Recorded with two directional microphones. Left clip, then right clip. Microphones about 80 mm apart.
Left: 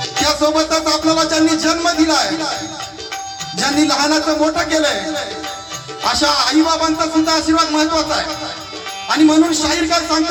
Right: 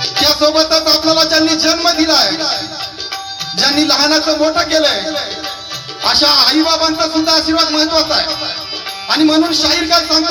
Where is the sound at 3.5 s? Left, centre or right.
Left.